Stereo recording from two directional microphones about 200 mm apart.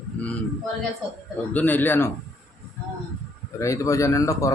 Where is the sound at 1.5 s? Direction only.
10° left (ahead or behind).